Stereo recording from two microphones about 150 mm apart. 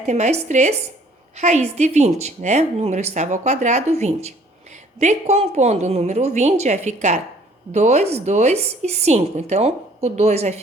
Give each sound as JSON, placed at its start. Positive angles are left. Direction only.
{"t": 0.0, "sound": "a woman's voice", "side_deg": -45}